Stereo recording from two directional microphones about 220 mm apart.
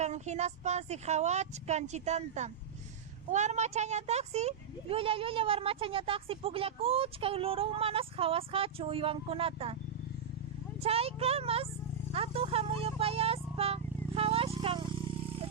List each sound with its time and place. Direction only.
0.0 s a woman's voice: 30° right (ahead or behind)
10.8 s speech: 25° right (ahead or behind)
12.1 s a sound: 25° right (ahead or behind)